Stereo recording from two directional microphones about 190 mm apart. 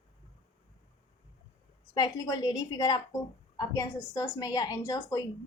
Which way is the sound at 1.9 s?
20° left (ahead or behind).